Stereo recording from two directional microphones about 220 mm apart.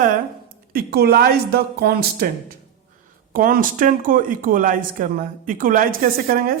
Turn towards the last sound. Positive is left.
turn(degrees=-40)  # may be behind; listen again after turning